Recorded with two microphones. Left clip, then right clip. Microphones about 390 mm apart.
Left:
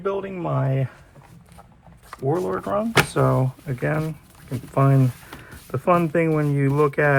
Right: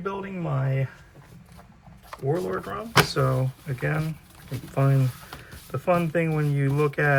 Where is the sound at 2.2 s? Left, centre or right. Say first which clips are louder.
Left 4 dB; centre.